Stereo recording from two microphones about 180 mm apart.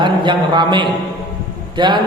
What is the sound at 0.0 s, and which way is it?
A man's voice, 25° right (ahead or behind).